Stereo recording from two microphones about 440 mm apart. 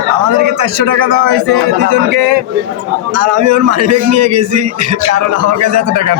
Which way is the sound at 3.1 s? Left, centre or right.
Right.